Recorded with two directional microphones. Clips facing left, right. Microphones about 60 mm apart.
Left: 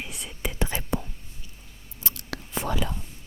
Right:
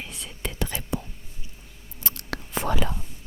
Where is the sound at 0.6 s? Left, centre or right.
Left.